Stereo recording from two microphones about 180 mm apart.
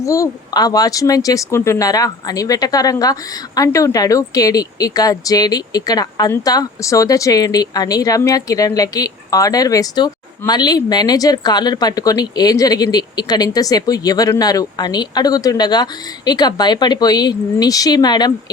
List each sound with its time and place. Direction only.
0.0 s speech: 15° left (ahead or behind)